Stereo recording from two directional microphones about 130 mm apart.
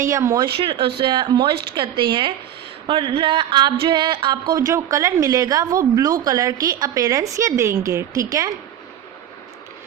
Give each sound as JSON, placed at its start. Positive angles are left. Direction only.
{"t": 0.0, "sound": "speech", "side_deg": -20}
{"t": 0.3, "sound": "speech", "side_deg": -40}